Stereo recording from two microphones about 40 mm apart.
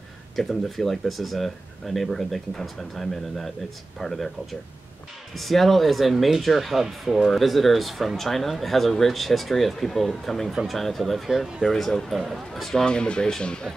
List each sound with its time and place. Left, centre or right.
0.4 s speech: centre
11.7 s speech: centre
12.1 s speech: centre
12.7 s speech: left